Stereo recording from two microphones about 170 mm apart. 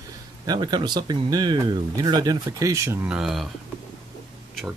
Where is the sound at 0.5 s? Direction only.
25° right (ahead or behind).